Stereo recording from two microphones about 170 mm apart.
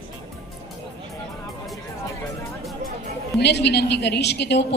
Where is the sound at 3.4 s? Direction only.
80° left.